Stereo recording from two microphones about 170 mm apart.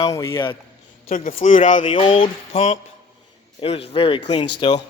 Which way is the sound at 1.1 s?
50° left (ahead or behind).